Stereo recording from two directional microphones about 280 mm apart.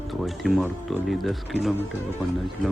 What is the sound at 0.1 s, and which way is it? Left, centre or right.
Speech, centre.